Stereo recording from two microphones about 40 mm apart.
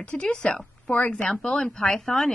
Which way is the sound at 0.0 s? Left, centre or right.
Left.